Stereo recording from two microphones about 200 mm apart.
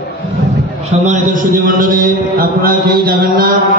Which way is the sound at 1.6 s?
40° right (ahead or behind).